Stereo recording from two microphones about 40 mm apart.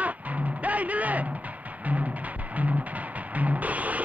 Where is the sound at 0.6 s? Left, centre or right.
Right.